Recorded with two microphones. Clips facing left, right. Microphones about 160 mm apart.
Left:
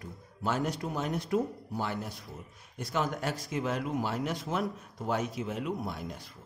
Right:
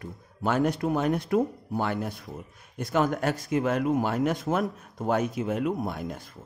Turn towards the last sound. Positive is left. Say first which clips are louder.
# right 5 dB
turn(degrees=-55)  # may be behind; listen again after turning